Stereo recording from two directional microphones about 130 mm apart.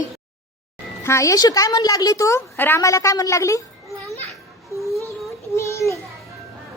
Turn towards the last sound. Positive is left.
turn(degrees=20)  # may be behind; listen again after turning